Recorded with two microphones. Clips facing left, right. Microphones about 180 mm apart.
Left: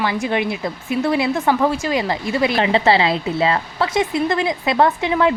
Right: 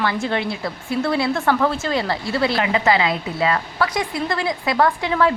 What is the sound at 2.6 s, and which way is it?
A woman's voice, 30° left (ahead or behind).